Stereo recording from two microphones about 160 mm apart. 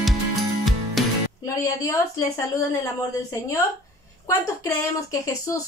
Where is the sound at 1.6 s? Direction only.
20° left (ahead or behind).